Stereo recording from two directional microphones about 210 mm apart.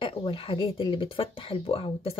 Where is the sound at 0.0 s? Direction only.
25° left (ahead or behind).